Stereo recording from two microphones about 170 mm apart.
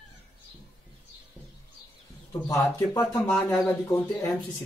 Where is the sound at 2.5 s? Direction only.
15° left (ahead or behind).